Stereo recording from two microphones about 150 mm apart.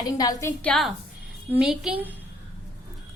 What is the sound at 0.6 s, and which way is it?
Music, 5° left (ahead or behind).